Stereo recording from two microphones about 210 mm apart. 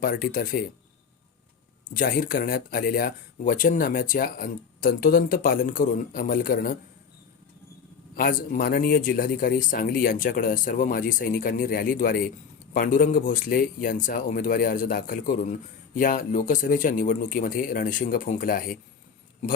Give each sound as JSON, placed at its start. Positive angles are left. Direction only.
{"t": 0.0, "sound": "speech", "side_deg": 40}
{"t": 1.9, "sound": "speech", "side_deg": 40}
{"t": 8.1, "sound": "speech", "side_deg": 40}